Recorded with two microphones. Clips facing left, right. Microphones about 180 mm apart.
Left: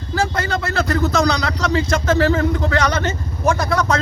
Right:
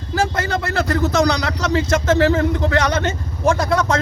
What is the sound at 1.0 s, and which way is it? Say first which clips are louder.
A man's voice: right 2 dB; 15° right (ahead or behind).